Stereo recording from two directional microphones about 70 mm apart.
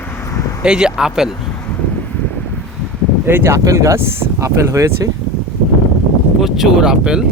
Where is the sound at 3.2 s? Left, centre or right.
Right.